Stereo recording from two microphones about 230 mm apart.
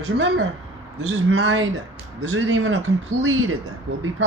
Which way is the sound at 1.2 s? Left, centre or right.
Right.